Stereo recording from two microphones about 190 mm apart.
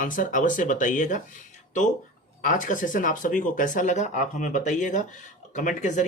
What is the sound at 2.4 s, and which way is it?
Speech, 45° left (ahead or behind).